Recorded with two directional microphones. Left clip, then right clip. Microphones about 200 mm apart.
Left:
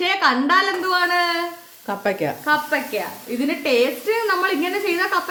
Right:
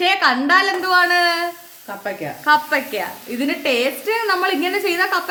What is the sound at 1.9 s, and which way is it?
Speech, 55° left (ahead or behind).